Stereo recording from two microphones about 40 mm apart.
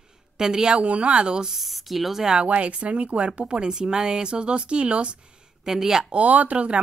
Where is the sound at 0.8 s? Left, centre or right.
Right.